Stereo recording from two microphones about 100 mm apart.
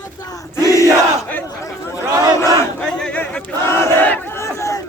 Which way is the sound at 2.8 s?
10° left (ahead or behind).